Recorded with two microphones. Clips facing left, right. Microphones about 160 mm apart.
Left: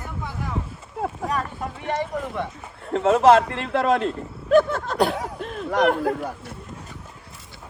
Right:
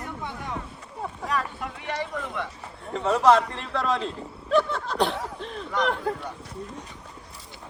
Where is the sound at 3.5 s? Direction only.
65° left (ahead or behind); by 4.9 s 50° left (ahead or behind).